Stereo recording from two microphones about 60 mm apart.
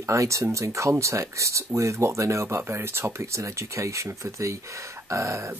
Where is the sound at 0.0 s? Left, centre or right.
Right.